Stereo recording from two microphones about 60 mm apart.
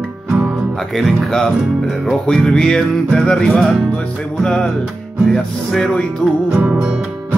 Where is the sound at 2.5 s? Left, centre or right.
Centre.